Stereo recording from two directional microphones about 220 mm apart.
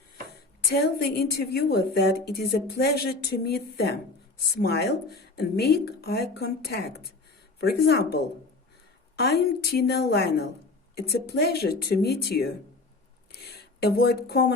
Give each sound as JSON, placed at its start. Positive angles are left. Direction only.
{"t": 0.7, "sound": "a woman's voice", "side_deg": 45}